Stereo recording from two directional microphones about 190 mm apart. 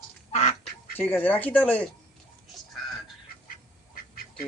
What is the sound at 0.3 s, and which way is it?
Duck, 35° left (ahead or behind).